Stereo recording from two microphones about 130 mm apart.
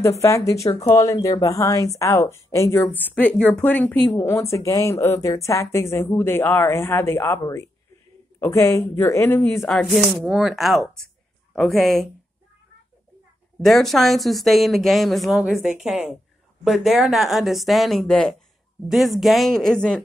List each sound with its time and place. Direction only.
0.2 s speech: 25° left (ahead or behind)
9.6 s speech: centre (ahead or behind)
13.6 s speech: centre (ahead or behind)